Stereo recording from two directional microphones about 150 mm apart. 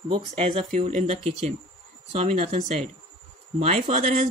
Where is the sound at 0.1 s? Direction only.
35° right (ahead or behind).